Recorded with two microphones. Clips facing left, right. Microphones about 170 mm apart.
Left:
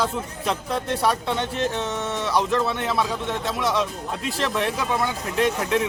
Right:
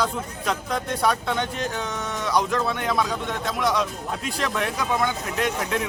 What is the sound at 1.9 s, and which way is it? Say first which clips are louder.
Speech: left 3 dB; 25° left (ahead or behind).